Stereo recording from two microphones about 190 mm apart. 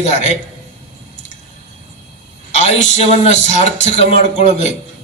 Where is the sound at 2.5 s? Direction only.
35° left (ahead or behind).